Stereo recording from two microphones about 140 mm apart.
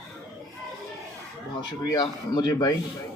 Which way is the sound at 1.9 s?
30° left (ahead or behind).